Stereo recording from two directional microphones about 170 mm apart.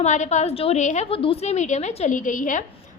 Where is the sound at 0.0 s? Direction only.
45° left (ahead or behind).